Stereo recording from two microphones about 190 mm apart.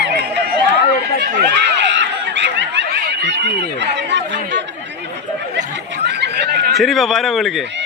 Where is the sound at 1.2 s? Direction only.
65° right (ahead or behind).